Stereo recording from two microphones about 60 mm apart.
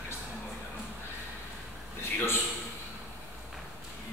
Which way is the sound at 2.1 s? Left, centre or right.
Left.